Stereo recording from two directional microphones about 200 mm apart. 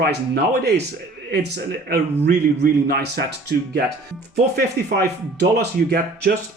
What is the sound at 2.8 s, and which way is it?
Speech, 55° right (ahead or behind).